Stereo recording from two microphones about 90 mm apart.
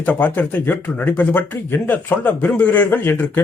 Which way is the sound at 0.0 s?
20° left (ahead or behind).